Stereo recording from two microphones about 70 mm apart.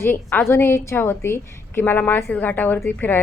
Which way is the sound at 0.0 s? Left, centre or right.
Left.